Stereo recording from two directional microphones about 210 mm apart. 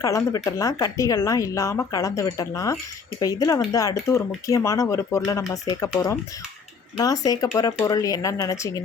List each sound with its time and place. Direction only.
0.0 s speech: 15° left (ahead or behind)
7.3 s speech: 20° left (ahead or behind)